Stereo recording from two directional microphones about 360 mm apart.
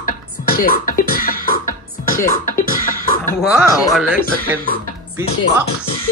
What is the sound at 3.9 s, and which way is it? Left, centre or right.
Speech, centre.